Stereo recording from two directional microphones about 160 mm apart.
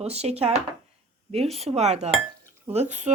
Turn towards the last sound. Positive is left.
turn(degrees=-45)  # may be behind; listen again after turning